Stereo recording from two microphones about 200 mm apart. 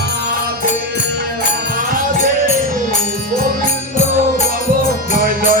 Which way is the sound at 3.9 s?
35° left (ahead or behind).